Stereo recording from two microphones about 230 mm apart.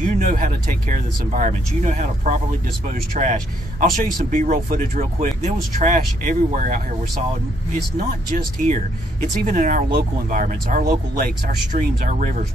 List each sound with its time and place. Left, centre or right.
0.0 s speech: right
8.3 s speech: right